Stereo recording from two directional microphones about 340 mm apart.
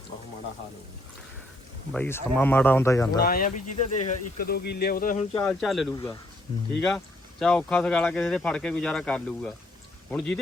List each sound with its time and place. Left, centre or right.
1.9 s speech: centre
3.2 s speech: left
5.4 s speech: centre